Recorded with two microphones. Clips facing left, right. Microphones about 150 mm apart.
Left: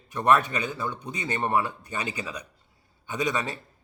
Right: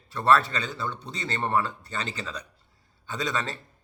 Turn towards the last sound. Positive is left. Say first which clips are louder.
# left 2 dB
turn(degrees=15)  # may be behind; listen again after turning